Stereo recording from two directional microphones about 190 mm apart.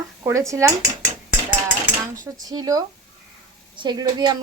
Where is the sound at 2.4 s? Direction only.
20° right (ahead or behind).